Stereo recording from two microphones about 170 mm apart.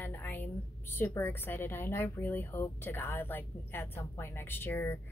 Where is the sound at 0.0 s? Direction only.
10° left (ahead or behind).